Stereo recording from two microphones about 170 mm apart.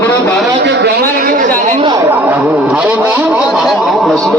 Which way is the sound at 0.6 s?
80° right.